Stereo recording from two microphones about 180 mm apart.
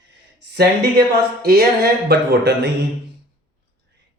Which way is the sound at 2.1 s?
65° right (ahead or behind).